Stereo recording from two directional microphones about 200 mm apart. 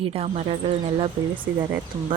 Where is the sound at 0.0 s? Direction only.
30° right (ahead or behind).